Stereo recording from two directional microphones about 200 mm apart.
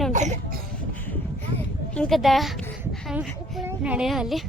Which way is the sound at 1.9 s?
5° left (ahead or behind).